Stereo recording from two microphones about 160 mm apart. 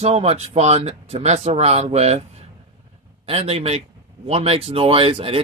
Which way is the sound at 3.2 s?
40° right (ahead or behind).